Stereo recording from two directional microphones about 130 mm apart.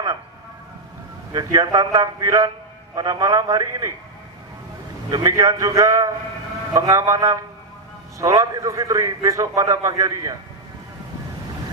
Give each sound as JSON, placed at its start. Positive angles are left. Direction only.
{"t": 1.3, "sound": "a man's voice", "side_deg": -30}
{"t": 5.1, "sound": "a man's voice", "side_deg": -25}